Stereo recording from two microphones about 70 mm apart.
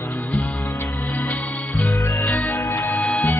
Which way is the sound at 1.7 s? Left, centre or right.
Left.